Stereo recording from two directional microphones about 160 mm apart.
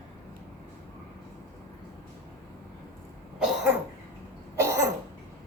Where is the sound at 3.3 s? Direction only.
5° right (ahead or behind).